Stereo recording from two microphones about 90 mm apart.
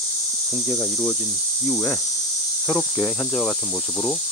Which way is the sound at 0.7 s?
5° left (ahead or behind).